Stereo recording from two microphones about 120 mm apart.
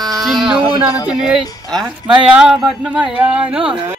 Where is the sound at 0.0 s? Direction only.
Centre (ahead or behind).